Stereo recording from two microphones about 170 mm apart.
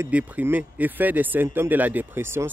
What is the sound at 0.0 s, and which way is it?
Speech, 10° right (ahead or behind).